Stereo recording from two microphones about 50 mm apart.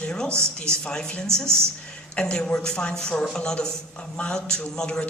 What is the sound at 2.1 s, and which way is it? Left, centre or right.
A man's voice, centre.